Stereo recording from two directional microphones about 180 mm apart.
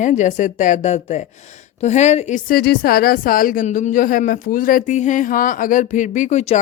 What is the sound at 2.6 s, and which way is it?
Speech, 60° left (ahead or behind).